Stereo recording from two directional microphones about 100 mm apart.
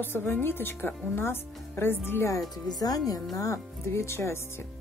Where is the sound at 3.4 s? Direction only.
30° left (ahead or behind).